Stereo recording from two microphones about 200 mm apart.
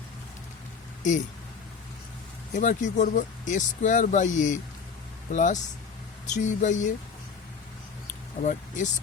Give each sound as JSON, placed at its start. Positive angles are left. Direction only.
{"t": 2.6, "sound": "speech", "side_deg": 40}
{"t": 8.4, "sound": "speech", "side_deg": 40}